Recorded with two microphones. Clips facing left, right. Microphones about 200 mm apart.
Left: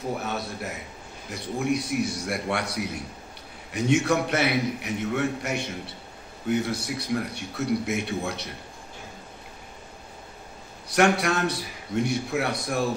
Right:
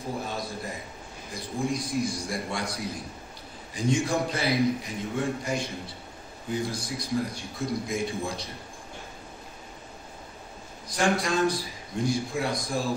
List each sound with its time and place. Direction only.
0.2 s a man's voice: 70° left (ahead or behind)
10.9 s a man's voice: 70° left (ahead or behind)